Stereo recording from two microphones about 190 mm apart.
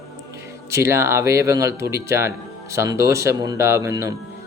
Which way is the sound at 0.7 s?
15° right (ahead or behind).